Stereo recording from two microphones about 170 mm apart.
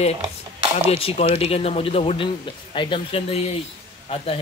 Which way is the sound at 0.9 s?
35° left (ahead or behind).